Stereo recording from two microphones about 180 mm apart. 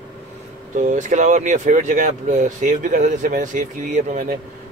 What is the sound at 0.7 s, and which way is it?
Speech, 45° right (ahead or behind).